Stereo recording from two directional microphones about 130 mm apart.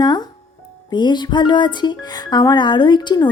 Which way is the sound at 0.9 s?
35° left (ahead or behind).